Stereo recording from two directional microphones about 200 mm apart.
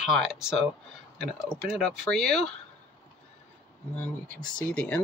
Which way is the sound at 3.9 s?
5° left (ahead or behind).